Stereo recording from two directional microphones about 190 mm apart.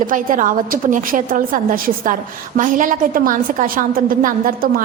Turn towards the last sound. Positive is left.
turn(degrees=-50)  # may be behind; listen again after turning